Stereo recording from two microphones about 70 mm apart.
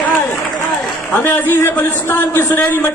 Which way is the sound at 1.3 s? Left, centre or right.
Left.